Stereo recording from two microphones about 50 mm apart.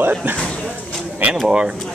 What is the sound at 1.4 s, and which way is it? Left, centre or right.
Speech, centre.